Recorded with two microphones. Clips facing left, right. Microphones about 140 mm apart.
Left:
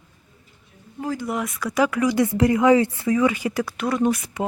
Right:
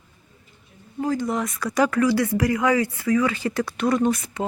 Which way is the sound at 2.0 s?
20° left (ahead or behind).